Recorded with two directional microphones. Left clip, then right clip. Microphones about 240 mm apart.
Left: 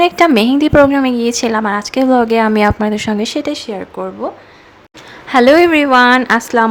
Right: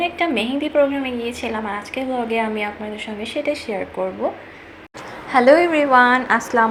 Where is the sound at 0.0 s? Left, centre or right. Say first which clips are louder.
Left 10 dB; left.